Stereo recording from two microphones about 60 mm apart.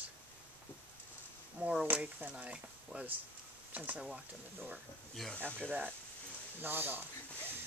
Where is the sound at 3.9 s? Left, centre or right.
Centre.